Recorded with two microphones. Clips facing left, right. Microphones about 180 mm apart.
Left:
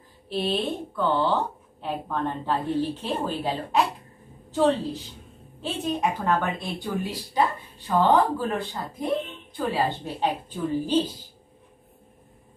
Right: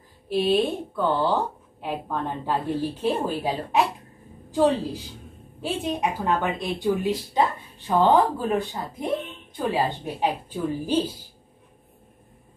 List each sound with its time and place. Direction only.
0.3 s a woman's voice: 10° right (ahead or behind)
4.5 s a woman's voice: 10° right (ahead or behind)